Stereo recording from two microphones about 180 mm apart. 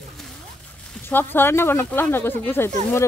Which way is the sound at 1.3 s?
10° left (ahead or behind).